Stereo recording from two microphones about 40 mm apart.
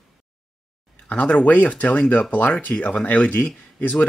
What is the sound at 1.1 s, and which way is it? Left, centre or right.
Speech, left.